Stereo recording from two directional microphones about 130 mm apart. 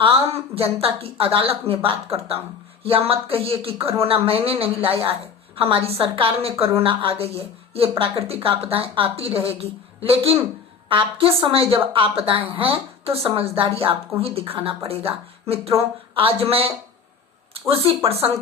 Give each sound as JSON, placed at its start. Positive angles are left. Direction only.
{"t": 0.0, "sound": "a woman's voice", "side_deg": -45}